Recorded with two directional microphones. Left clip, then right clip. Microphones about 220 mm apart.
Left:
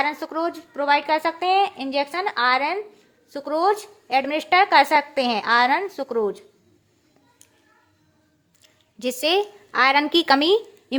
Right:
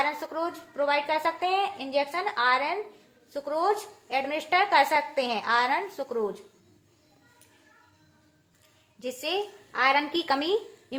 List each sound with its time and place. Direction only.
0.0 s a woman's voice: 50° left (ahead or behind)
9.0 s a woman's voice: 50° left (ahead or behind)